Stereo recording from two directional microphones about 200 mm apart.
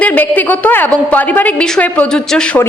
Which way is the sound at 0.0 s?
10° left (ahead or behind).